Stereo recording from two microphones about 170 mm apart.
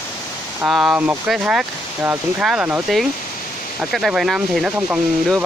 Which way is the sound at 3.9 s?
Centre (ahead or behind).